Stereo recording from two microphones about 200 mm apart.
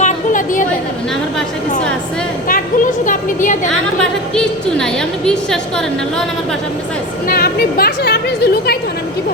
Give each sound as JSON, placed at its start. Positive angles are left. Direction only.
{"t": 0.0, "sound": "chatter", "side_deg": 40}
{"t": 2.5, "sound": "a sound", "side_deg": 40}
{"t": 4.4, "sound": "a woman's voice", "side_deg": 5}
{"t": 7.3, "sound": "a woman's voice", "side_deg": 50}